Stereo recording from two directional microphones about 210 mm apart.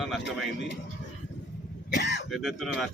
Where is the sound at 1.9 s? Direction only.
55° left (ahead or behind).